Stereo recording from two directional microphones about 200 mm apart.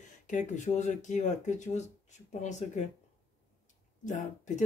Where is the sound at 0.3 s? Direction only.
35° left (ahead or behind).